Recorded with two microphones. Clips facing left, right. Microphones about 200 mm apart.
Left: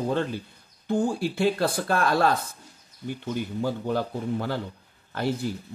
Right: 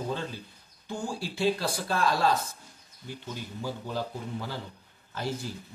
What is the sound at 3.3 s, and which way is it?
Speech, 60° left (ahead or behind).